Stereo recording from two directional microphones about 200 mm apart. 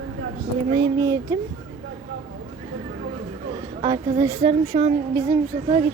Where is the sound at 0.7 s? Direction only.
20° right (ahead or behind).